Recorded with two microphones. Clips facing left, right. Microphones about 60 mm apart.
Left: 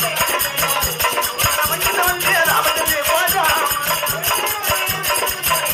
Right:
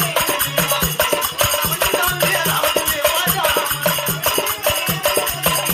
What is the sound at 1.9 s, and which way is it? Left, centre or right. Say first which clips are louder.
Music: left 4 dB; left.